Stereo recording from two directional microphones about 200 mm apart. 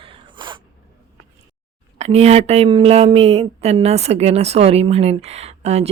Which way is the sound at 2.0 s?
30° right (ahead or behind).